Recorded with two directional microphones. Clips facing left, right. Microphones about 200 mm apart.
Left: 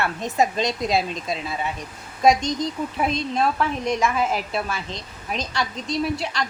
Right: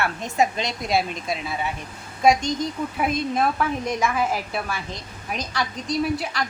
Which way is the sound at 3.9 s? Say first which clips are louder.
Left 5 dB; centre (ahead or behind).